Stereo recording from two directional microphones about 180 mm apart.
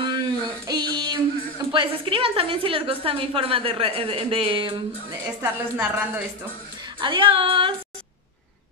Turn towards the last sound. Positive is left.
turn(degrees=-30)  # may be behind; listen again after turning